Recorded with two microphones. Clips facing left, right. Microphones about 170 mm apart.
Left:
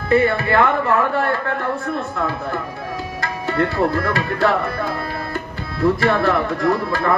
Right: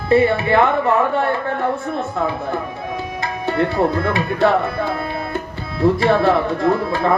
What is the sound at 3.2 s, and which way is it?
Music, 20° right (ahead or behind).